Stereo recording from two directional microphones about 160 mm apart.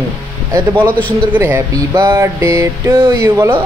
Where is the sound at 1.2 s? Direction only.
10° right (ahead or behind).